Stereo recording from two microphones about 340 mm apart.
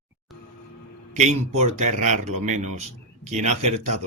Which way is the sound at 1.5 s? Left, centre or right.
Centre.